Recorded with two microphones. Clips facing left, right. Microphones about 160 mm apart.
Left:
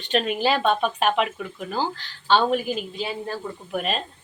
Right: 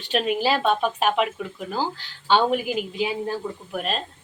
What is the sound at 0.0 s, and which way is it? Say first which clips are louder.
Speech: even; 5° right (ahead or behind).